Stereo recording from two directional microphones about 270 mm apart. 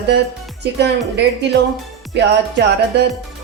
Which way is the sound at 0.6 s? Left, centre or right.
Right.